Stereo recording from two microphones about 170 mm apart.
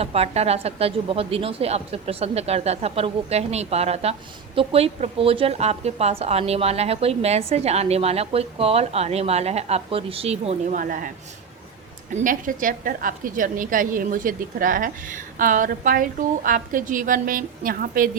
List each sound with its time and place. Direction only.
0.0 s a woman's voice: 35° right (ahead or behind); by 11.1 s 55° right (ahead or behind)
12.1 s a woman's voice: 50° right (ahead or behind)